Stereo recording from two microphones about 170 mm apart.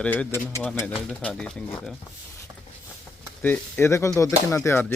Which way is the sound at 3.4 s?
10° left (ahead or behind).